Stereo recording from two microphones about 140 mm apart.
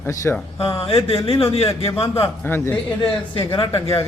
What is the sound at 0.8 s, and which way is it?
A man's voice, 40° left (ahead or behind).